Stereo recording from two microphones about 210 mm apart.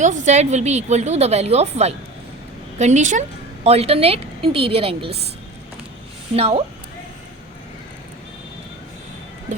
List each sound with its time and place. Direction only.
0.0 s a woman's voice: 35° right (ahead or behind)
6.3 s a woman's voice: 30° right (ahead or behind)